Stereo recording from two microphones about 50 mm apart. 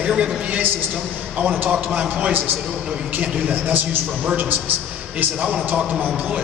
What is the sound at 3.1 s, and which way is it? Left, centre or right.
Speech, right.